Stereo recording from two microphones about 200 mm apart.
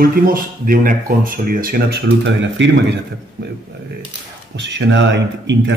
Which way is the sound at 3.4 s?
50° right (ahead or behind).